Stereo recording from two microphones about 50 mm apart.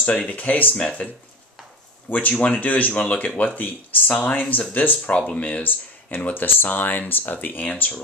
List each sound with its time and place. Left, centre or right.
0.3 s speech: left
0.7 s speech: left
2.1 s speech: left